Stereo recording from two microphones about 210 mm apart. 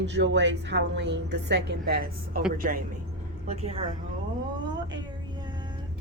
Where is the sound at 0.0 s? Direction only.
60° right (ahead or behind); by 2.8 s 40° right (ahead or behind).